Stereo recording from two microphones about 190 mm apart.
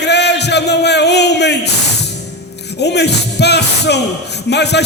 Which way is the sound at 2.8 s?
60° left (ahead or behind).